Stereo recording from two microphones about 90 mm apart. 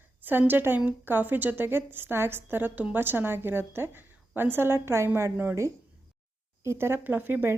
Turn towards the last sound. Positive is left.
turn(degrees=-25)  # may be behind; listen again after turning